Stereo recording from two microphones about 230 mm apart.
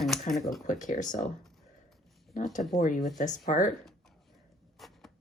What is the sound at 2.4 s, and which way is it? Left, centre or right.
Speech, left.